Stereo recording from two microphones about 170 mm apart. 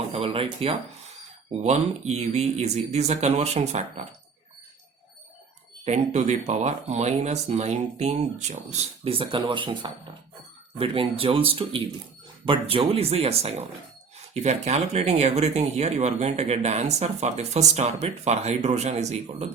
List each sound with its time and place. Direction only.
0.1 s speech: 30° right (ahead or behind)
5.8 s speech: 40° right (ahead or behind)
9.0 s speech: 30° right (ahead or behind)